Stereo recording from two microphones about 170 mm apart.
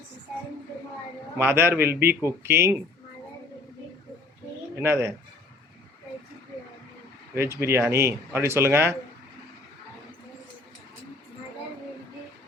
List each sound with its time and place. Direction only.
1.4 s speech: 15° right (ahead or behind)
4.8 s speech: 15° right (ahead or behind)
7.3 s speech: 15° right (ahead or behind)